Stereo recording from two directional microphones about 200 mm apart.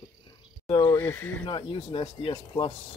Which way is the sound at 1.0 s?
10° left (ahead or behind).